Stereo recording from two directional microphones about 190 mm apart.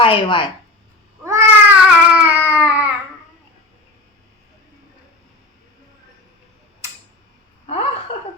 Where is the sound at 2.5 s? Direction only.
10° right (ahead or behind).